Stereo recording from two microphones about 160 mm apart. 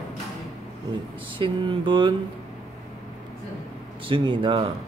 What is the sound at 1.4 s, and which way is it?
Speech, 30° right (ahead or behind).